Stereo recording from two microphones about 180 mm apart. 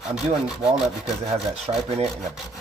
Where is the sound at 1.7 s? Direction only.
25° right (ahead or behind).